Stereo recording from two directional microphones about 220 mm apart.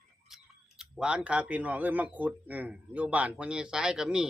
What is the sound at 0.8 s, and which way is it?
Speech, 5° right (ahead or behind).